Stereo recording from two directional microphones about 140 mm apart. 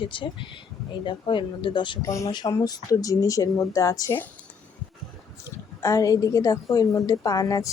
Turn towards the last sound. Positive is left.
turn(degrees=25)  # may be behind; listen again after turning